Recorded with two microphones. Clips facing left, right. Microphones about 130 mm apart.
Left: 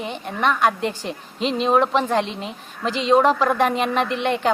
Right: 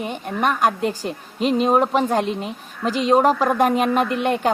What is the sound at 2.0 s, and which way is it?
Speech, 10° right (ahead or behind).